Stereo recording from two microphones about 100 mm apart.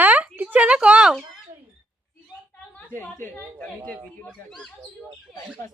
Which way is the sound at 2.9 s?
25° left (ahead or behind).